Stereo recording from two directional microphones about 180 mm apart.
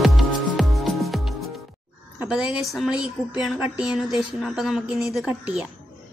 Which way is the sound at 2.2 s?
5° right (ahead or behind).